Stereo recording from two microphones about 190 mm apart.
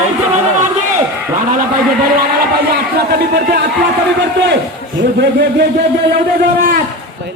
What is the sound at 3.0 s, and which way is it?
Speech, 60° right (ahead or behind).